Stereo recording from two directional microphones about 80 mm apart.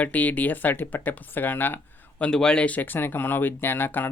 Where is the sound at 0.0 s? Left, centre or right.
Centre.